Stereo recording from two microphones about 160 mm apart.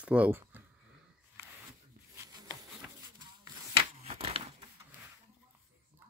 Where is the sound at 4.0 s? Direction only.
35° right (ahead or behind).